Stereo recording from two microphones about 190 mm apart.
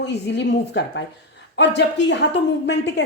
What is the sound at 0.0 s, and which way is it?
A woman's voice, 65° left (ahead or behind).